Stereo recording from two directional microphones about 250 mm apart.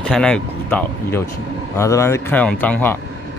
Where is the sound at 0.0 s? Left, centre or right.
Centre.